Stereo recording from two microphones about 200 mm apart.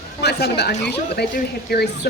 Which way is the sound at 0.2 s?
55° left (ahead or behind).